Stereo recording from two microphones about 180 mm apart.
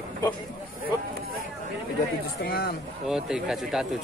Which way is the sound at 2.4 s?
55° left (ahead or behind).